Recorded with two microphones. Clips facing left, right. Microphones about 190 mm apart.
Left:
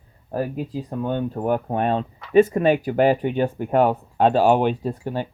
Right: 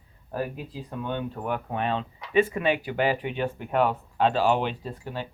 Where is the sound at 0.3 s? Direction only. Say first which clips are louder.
Left 6 dB; 40° left (ahead or behind).